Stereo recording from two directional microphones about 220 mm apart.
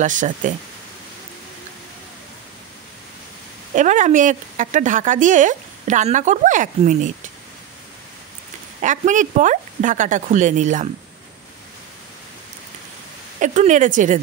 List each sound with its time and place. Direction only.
0.0 s a woman's voice: 35° right (ahead or behind)
3.7 s a woman's voice: 35° right (ahead or behind)
8.8 s a woman's voice: 35° right (ahead or behind)
13.4 s a woman's voice: 35° right (ahead or behind)